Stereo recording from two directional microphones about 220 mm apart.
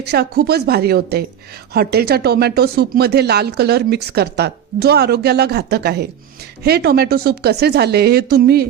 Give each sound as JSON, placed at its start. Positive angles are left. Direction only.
{"t": 0.1, "sound": "speech", "side_deg": -45}